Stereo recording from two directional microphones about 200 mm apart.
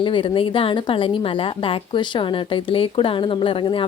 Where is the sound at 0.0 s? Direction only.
25° left (ahead or behind).